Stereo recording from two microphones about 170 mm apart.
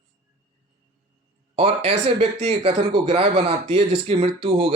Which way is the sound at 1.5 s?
35° right (ahead or behind).